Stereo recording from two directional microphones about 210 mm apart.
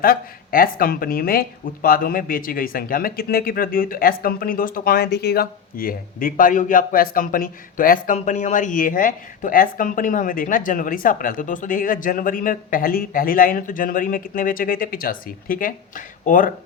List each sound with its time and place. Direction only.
0.0 s speech: 45° left (ahead or behind)